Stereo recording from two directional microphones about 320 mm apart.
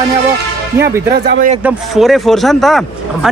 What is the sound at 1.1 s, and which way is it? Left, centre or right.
Bell, right.